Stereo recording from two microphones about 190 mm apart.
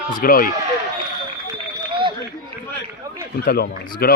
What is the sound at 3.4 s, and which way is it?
Speech, 50° left (ahead or behind).